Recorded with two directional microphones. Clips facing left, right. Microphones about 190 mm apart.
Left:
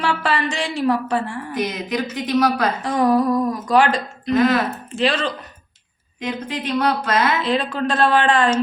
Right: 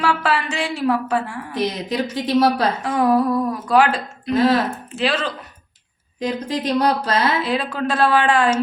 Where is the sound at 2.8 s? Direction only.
5° right (ahead or behind).